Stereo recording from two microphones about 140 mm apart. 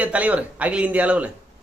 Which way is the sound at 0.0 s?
10° right (ahead or behind).